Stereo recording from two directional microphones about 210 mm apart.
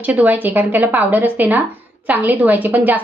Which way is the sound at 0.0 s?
10° right (ahead or behind).